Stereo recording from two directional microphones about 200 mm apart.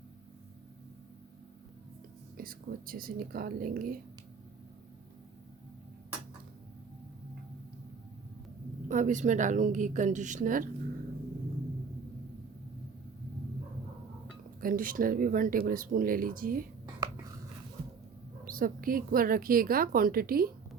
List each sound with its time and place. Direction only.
2.4 s speech: 45° right (ahead or behind)
8.9 s a woman's voice: 40° right (ahead or behind)
14.6 s speech: 45° right (ahead or behind)
18.4 s speech: 45° right (ahead or behind)